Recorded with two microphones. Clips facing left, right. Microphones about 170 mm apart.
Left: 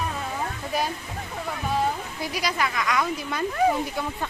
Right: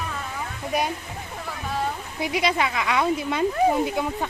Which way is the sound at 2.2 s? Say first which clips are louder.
Right 7 dB; 20° right (ahead or behind).